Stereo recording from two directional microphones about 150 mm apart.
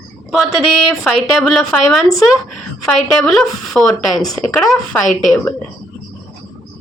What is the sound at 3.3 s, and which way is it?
A woman's voice, centre (ahead or behind).